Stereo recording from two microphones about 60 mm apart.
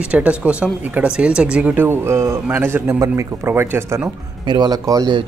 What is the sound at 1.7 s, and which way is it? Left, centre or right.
Speech, right.